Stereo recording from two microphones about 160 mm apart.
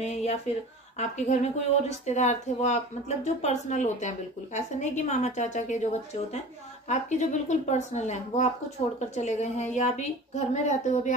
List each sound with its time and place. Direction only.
0.0 s speech: 45° left (ahead or behind)
6.9 s speech: 45° left (ahead or behind)